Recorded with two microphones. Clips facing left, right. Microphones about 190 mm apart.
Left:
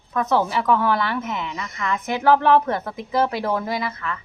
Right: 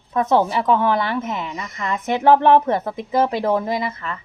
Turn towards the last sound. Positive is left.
turn(degrees=-25)  # may be behind; listen again after turning